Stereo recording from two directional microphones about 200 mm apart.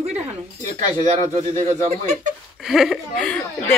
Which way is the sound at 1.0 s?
35° right (ahead or behind).